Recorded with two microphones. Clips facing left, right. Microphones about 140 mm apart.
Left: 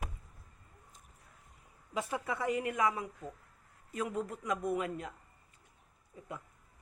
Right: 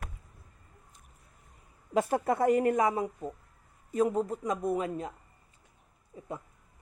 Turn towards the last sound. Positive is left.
turn(degrees=-25)  # may be behind; listen again after turning